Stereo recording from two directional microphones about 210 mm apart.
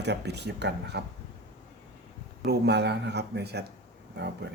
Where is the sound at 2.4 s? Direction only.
50° right (ahead or behind).